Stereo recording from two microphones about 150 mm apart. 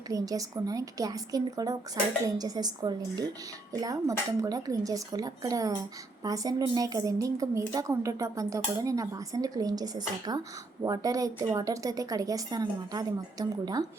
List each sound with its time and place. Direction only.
0.1 s a woman's voice: 25° right (ahead or behind)